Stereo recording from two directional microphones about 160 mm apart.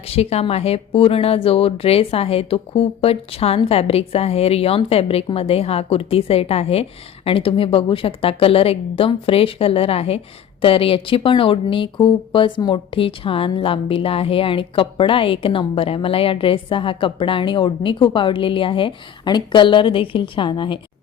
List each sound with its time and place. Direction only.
0.1 s speech: 40° left (ahead or behind)